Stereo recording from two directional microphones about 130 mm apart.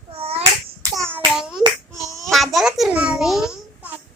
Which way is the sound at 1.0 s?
15° right (ahead or behind).